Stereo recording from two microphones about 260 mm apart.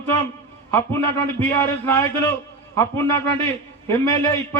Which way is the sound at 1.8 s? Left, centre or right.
Centre.